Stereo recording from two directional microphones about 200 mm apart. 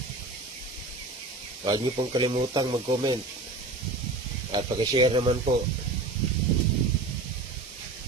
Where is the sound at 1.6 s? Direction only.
20° right (ahead or behind).